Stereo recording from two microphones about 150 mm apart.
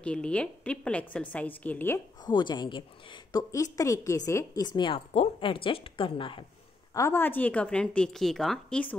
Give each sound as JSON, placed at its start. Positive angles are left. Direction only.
{"t": 0.0, "sound": "a woman's voice", "side_deg": 5}
{"t": 2.2, "sound": "a woman's voice", "side_deg": 30}
{"t": 6.9, "sound": "a woman's voice", "side_deg": 20}